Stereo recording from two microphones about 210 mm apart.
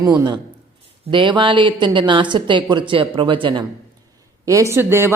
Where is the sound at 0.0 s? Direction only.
20° right (ahead or behind).